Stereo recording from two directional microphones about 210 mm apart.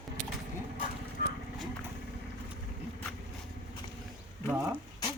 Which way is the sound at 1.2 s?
45° left (ahead or behind).